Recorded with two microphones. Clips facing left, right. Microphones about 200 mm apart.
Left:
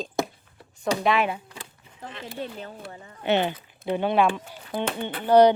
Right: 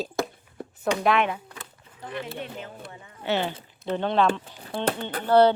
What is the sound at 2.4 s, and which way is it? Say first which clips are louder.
Speech: left 2 dB; 35° left (ahead or behind).